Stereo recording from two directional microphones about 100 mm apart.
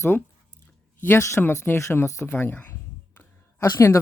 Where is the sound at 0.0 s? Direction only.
25° left (ahead or behind).